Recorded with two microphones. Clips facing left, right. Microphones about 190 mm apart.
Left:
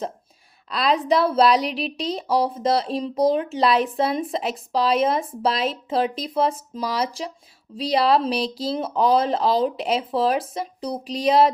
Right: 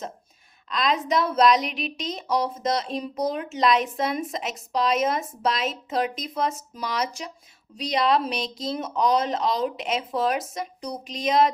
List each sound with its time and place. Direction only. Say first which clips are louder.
0.7 s a woman's voice: left 4 dB; 35° left (ahead or behind)